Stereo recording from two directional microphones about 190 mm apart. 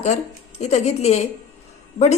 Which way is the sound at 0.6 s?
35° left (ahead or behind).